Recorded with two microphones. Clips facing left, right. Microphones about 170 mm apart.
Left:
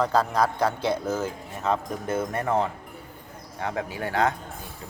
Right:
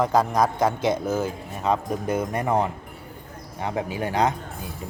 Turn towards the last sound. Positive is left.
turn(degrees=-20)  # may be behind; listen again after turning